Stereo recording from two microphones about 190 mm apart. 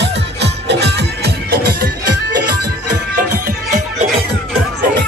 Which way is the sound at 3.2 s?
45° right (ahead or behind).